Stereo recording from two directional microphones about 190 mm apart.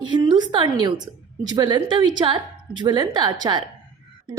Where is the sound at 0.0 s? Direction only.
25° right (ahead or behind).